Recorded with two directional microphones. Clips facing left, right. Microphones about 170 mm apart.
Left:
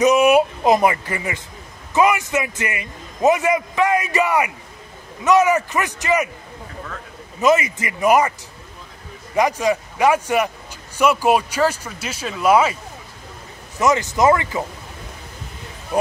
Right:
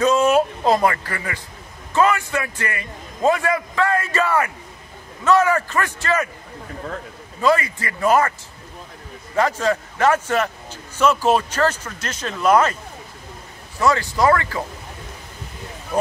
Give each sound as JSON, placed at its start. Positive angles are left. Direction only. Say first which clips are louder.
{"t": 0.0, "sound": "a man's voice", "louder": "left 2 dB", "side_deg": 15}
{"t": 7.3, "sound": "a man's voice", "louder": "left 2 dB", "side_deg": 20}
{"t": 13.7, "sound": "speech", "louder": "left 1 dB", "side_deg": 20}
{"t": 15.9, "sound": "a man's voice", "louder": "left 1 dB", "side_deg": 10}